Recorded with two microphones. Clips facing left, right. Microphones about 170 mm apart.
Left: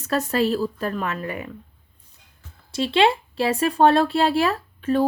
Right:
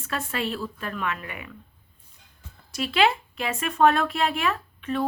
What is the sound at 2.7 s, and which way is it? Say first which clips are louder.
Speech: left 4 dB; 30° left (ahead or behind).